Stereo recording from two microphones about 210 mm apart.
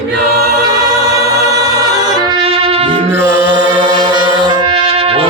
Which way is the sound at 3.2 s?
15° right (ahead or behind).